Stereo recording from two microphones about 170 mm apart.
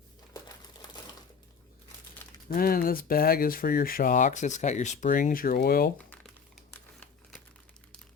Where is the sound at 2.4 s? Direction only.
60° left (ahead or behind).